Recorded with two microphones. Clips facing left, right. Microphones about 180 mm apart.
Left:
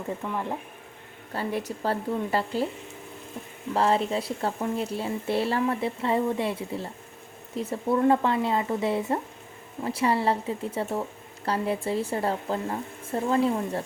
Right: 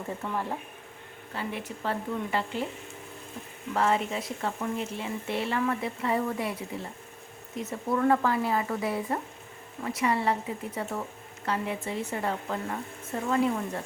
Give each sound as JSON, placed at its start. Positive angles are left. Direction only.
{"t": 1.3, "sound": "speech", "side_deg": 40}
{"t": 3.8, "sound": "speech", "side_deg": 30}